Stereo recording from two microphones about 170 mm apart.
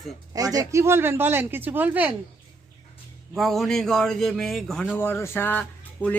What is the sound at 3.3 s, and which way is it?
Speech, centre (ahead or behind).